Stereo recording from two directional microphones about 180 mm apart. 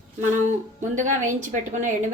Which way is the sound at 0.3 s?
45° right (ahead or behind).